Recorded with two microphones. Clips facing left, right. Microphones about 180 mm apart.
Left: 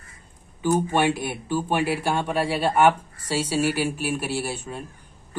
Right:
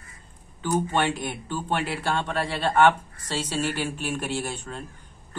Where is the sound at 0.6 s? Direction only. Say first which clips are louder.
Left 3 dB; 10° left (ahead or behind).